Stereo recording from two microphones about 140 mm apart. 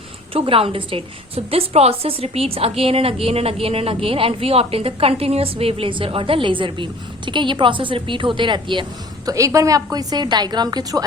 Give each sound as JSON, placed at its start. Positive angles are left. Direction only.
{"t": 0.3, "sound": "a woman's voice", "side_deg": -40}